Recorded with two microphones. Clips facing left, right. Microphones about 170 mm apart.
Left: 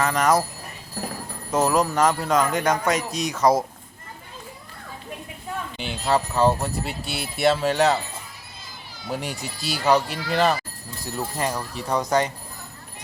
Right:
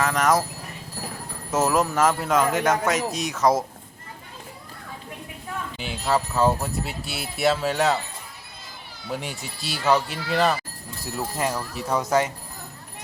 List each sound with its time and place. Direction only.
0.0 s speech: centre (ahead or behind)
1.5 s speech: 5° right (ahead or behind)
5.7 s speech: centre (ahead or behind)
9.1 s speech: centre (ahead or behind)